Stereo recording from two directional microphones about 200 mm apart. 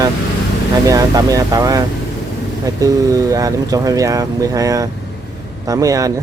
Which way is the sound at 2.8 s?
15° right (ahead or behind).